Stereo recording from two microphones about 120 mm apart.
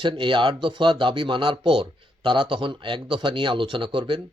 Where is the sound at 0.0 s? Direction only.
40° right (ahead or behind).